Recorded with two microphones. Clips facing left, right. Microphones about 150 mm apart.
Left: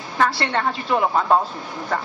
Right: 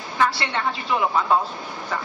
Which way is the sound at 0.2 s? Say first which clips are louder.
Left 2 dB; 45° left (ahead or behind).